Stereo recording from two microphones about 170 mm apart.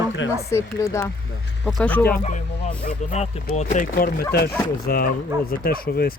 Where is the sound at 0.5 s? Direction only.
15° left (ahead or behind).